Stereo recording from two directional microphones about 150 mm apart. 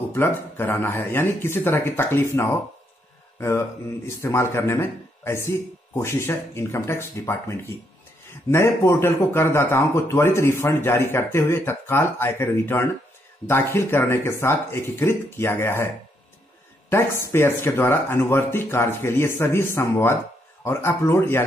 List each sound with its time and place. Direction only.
0.1 s speech: 15° left (ahead or behind)
16.9 s speech: 15° left (ahead or behind)